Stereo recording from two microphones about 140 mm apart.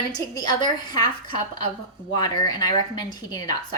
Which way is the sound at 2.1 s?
30° left (ahead or behind).